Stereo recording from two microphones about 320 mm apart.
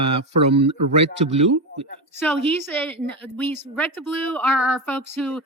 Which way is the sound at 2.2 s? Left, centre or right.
Centre.